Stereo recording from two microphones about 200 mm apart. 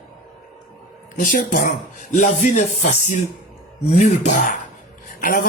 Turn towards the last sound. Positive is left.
turn(degrees=45)  # may be behind; listen again after turning